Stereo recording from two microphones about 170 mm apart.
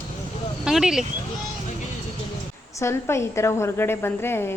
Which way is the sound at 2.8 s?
15° left (ahead or behind).